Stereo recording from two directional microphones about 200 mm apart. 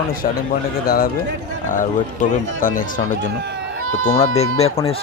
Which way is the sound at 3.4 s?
60° right (ahead or behind).